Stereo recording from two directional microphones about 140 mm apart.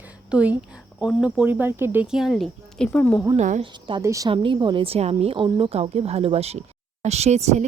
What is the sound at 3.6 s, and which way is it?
Speech, 40° right (ahead or behind).